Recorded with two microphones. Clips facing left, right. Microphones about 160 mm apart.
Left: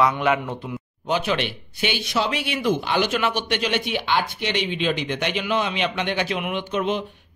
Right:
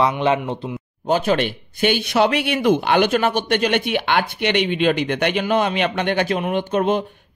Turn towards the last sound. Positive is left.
turn(degrees=-50)  # may be behind; listen again after turning